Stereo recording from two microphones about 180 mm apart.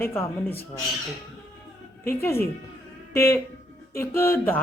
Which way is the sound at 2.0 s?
15° left (ahead or behind).